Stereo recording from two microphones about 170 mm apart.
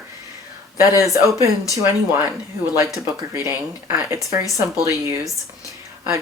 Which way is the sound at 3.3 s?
15° right (ahead or behind).